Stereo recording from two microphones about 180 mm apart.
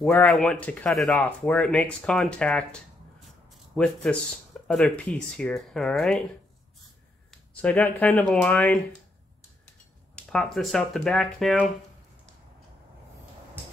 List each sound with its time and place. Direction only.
0.0 s speech: 5° left (ahead or behind)
7.2 s speech: 10° left (ahead or behind)
10.1 s speech: 5° left (ahead or behind)